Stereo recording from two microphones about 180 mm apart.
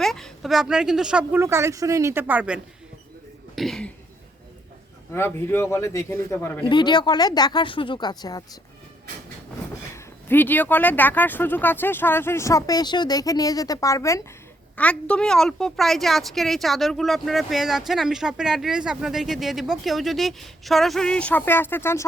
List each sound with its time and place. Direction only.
0.0 s a woman's voice: centre (ahead or behind)
5.1 s speech: 15° left (ahead or behind)
6.7 s speech: 25° left (ahead or behind)
9.9 s a woman's voice: 10° left (ahead or behind)